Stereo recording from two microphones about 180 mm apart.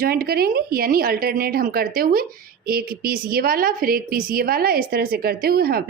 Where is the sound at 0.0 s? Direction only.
55° right (ahead or behind).